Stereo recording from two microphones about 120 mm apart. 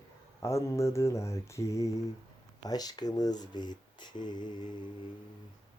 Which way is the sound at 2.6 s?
35° left (ahead or behind).